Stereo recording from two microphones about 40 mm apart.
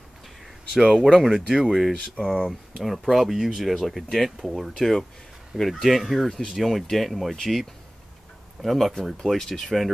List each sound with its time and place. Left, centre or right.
0.7 s speech: centre
2.0 s speech: centre
2.8 s speech: centre
5.6 s speech: centre
8.6 s speech: centre